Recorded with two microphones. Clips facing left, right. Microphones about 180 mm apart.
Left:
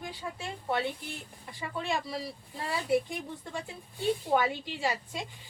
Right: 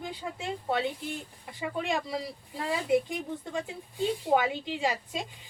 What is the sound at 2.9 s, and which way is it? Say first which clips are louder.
A woman's voice: right 2 dB; 20° right (ahead or behind).